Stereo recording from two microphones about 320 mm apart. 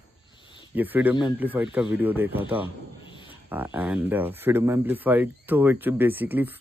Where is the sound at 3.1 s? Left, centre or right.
Centre.